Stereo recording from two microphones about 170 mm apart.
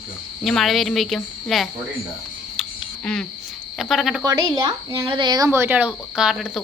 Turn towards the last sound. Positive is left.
turn(degrees=0)  # may be behind; listen again after turning